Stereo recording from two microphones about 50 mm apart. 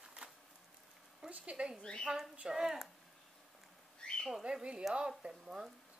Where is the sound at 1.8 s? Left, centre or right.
Centre.